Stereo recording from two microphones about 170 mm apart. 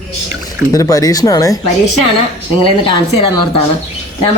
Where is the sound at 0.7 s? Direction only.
20° left (ahead or behind).